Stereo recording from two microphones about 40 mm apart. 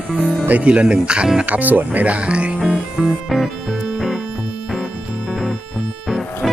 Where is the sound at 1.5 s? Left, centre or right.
Right.